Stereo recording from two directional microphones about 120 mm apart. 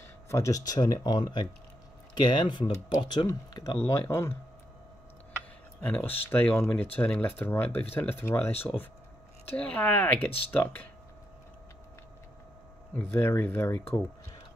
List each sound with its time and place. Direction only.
0.3 s speech: 25° left (ahead or behind)
3.3 s speech: 30° left (ahead or behind)
5.8 s speech: 15° left (ahead or behind)
13.1 s speech: 20° left (ahead or behind)